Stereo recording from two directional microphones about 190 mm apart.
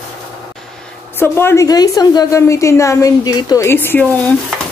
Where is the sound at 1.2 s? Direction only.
10° left (ahead or behind).